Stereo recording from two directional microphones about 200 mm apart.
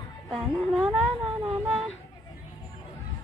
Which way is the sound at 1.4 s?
Centre (ahead or behind).